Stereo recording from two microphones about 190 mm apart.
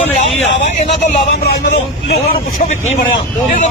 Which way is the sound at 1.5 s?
60° left (ahead or behind).